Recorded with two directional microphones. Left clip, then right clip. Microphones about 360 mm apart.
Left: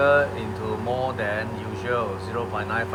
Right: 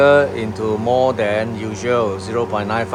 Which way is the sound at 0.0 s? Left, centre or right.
Centre.